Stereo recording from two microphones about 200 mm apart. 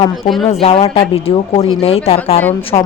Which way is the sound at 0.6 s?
30° left (ahead or behind).